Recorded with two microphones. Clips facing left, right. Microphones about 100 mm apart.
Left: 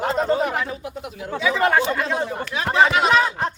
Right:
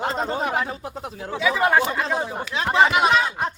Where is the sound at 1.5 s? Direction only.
10° right (ahead or behind).